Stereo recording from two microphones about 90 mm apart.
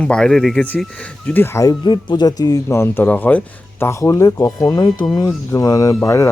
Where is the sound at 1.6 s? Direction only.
50° left (ahead or behind).